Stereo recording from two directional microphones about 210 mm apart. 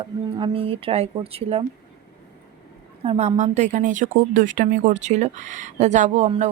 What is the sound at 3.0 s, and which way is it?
Speech, 30° right (ahead or behind).